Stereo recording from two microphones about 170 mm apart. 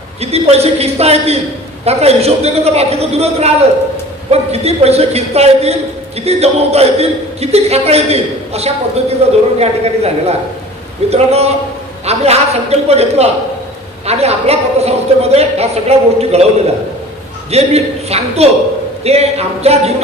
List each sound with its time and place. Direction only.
0.2 s a man's voice: 40° right (ahead or behind)